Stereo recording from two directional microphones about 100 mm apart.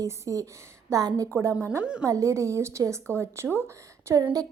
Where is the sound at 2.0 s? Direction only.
30° right (ahead or behind).